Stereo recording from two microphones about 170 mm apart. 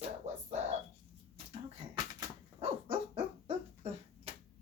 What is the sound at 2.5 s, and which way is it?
Dog, 35° right (ahead or behind).